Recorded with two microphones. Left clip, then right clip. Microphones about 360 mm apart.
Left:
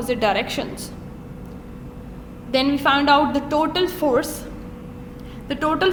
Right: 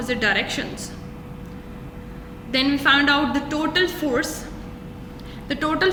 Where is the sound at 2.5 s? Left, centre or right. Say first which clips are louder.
Even; centre.